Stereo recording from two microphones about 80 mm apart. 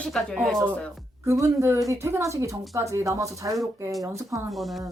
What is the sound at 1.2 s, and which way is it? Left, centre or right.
Speech, right.